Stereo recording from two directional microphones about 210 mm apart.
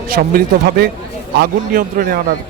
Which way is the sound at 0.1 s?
45° right (ahead or behind).